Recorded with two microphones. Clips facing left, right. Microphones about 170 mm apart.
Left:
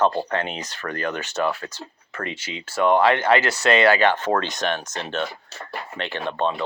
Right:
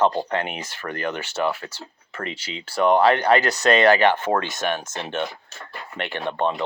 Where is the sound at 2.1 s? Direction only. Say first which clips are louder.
Even; 25° right (ahead or behind).